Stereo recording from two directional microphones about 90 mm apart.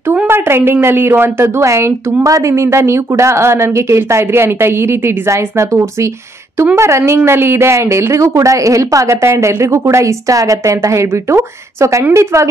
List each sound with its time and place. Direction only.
0.3 s a woman's voice: 25° right (ahead or behind)